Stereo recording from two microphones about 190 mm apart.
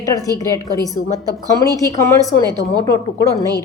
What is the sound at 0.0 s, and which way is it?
A woman's voice, 20° left (ahead or behind).